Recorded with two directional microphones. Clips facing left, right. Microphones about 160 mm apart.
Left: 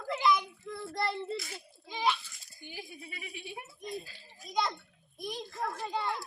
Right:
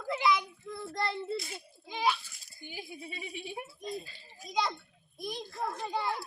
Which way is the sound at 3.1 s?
25° right (ahead or behind).